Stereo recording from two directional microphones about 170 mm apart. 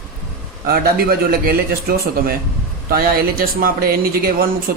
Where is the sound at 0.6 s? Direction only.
60° right (ahead or behind).